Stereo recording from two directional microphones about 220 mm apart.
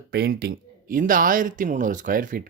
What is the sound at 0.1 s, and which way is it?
Speech, 45° right (ahead or behind).